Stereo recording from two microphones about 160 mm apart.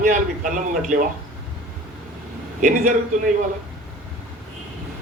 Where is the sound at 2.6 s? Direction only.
55° right (ahead or behind).